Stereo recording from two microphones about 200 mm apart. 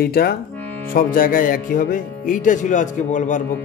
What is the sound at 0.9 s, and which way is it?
Speech, 45° left (ahead or behind).